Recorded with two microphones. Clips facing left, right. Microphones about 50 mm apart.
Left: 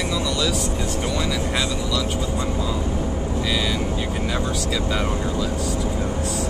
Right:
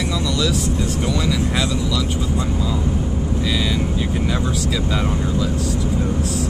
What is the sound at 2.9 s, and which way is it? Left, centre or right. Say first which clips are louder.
Vehicle: right 2 dB; left.